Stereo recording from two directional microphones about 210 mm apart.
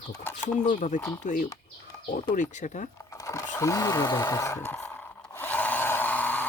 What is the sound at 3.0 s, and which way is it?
Sewing machine, 15° left (ahead or behind).